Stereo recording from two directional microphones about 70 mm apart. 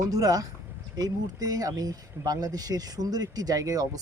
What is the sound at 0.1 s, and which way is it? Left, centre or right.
Speech, right.